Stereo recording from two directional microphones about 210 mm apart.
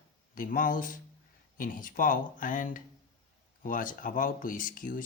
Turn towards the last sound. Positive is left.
turn(degrees=40)  # may be behind; listen again after turning